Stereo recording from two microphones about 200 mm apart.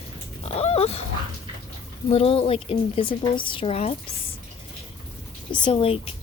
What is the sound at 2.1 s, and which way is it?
Speech, 30° left (ahead or behind).